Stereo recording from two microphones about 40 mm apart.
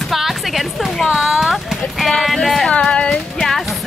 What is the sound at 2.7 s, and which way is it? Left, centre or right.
Female singing, left.